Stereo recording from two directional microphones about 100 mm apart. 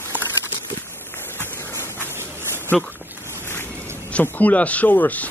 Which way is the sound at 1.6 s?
25° left (ahead or behind).